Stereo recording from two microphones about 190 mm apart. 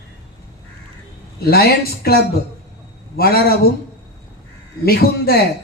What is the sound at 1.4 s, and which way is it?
A man's voice, 55° left (ahead or behind).